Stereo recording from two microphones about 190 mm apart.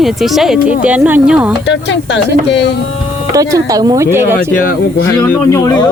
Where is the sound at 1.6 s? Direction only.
70° left (ahead or behind).